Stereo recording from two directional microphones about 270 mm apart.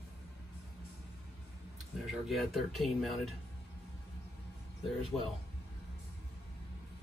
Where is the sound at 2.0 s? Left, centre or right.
Centre.